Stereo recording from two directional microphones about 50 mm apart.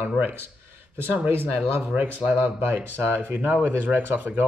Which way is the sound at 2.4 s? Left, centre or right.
Right.